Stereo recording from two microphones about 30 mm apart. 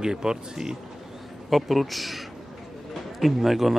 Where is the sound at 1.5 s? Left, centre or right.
Centre.